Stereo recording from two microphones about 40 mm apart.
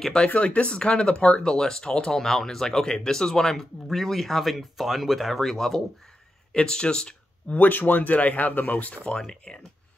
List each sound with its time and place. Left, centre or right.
0.0 s speech: centre
0.3 s speech: left
1.1 s speech: left
1.4 s speech: centre
6.5 s speech: left
7.4 s speech: left
9.0 s speech: centre